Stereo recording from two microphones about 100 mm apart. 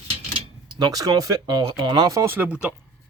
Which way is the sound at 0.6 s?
40° right (ahead or behind).